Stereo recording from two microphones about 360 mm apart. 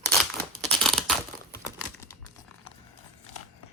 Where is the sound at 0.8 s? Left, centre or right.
Centre.